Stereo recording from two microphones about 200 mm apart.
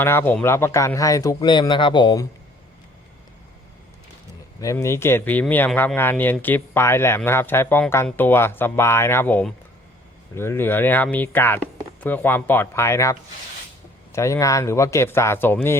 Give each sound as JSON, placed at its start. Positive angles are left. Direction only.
{"t": 0.0, "sound": "a man's voice", "side_deg": 10}
{"t": 4.6, "sound": "a man's voice", "side_deg": 15}